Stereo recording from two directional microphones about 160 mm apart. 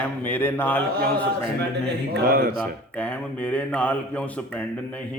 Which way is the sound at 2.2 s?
70° right (ahead or behind).